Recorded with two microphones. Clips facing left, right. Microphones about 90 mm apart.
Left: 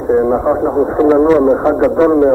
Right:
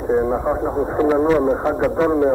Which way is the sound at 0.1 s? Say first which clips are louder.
Left 7 dB; 25° left (ahead or behind).